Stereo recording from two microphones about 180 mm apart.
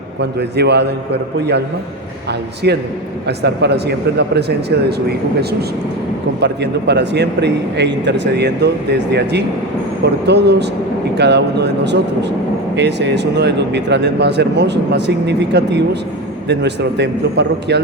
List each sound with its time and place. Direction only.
0.2 s speech: 70° right (ahead or behind)
2.6 s a man's voice: 65° right (ahead or behind)